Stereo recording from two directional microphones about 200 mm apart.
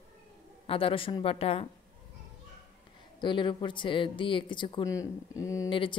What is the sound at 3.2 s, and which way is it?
Speech, 25° left (ahead or behind).